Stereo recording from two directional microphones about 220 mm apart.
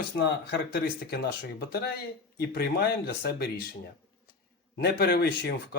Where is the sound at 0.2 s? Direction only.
50° left (ahead or behind).